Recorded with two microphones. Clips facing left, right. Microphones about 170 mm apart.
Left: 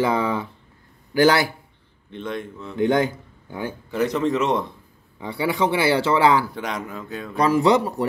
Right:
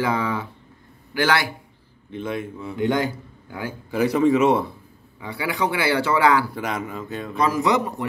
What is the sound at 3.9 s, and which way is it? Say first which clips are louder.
Speech: right 4 dB; 10° right (ahead or behind).